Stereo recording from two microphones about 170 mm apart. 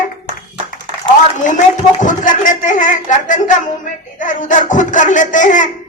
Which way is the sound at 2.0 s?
50° left (ahead or behind).